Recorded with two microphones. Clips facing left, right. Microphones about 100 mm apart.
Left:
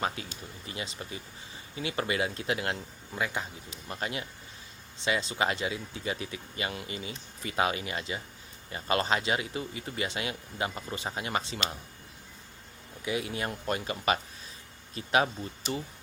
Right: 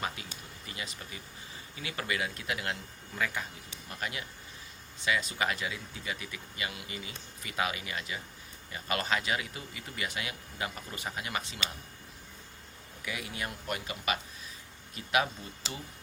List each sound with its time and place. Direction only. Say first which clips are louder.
0.2 s speech: left 4 dB; 35° left (ahead or behind)
13.1 s speech: left 6 dB; 25° left (ahead or behind)
15.6 s speech: left 8 dB; 90° right